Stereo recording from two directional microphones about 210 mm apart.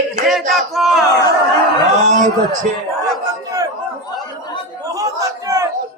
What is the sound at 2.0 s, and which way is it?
Speech, 35° right (ahead or behind).